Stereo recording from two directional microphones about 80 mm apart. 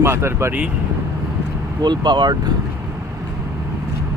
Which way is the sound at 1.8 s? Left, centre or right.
Right.